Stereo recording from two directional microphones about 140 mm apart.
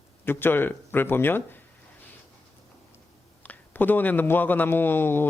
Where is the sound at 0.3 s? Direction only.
15° left (ahead or behind).